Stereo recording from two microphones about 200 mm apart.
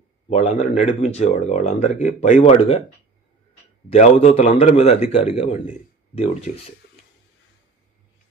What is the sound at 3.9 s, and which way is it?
Speech, 35° left (ahead or behind).